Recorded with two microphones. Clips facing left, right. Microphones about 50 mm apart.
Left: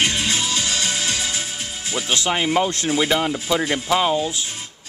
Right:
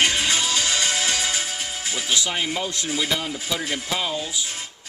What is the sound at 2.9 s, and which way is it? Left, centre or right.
Speech, left.